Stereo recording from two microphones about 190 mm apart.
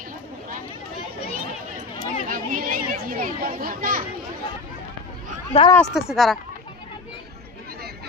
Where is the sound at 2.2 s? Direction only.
50° right (ahead or behind).